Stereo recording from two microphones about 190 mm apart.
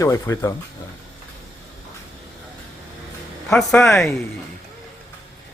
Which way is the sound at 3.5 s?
Centre (ahead or behind).